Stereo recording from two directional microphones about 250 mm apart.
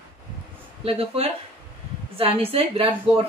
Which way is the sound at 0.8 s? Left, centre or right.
Right.